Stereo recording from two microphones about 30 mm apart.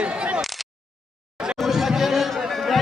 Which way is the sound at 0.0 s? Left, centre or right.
Right.